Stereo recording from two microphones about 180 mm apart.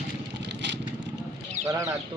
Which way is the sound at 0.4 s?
75° right (ahead or behind).